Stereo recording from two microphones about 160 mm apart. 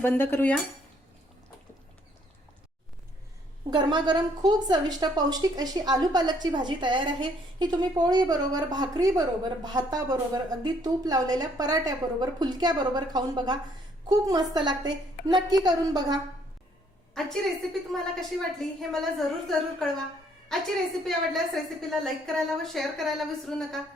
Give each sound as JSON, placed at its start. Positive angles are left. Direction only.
{"t": 0.0, "sound": "cutlery", "side_deg": 15}
{"t": 3.7, "sound": "a woman's voice", "side_deg": -25}
{"t": 17.9, "sound": "a woman's voice", "side_deg": 0}